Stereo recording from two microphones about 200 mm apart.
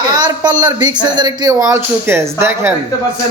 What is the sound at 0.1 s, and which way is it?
Speech, 20° right (ahead or behind).